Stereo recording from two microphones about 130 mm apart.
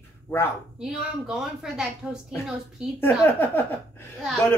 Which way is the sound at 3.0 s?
15° left (ahead or behind).